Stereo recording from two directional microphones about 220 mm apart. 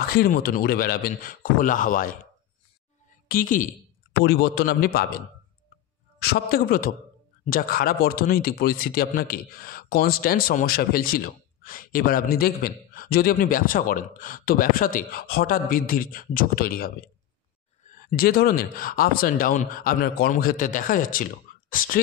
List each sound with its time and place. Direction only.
0.1 s speech: 45° left (ahead or behind)
3.3 s a man's voice: 40° left (ahead or behind)
6.2 s speech: 40° left (ahead or behind)
18.0 s speech: 40° left (ahead or behind)